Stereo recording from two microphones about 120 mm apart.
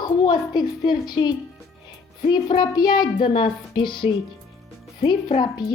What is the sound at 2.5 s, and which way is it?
A woman's voice, 35° left (ahead or behind).